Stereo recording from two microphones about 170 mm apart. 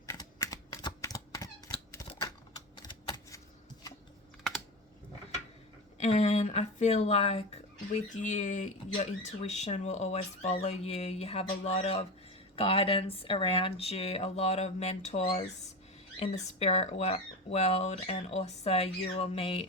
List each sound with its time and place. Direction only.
0.0 s typing: 15° left (ahead or behind)
6.0 s speech: 40° left (ahead or behind)